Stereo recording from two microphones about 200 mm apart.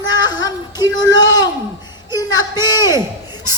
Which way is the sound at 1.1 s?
70° left (ahead or behind).